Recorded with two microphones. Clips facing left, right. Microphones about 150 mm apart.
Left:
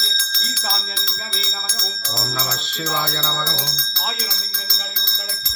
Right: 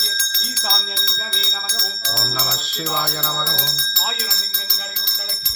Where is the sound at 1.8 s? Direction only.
10° right (ahead or behind).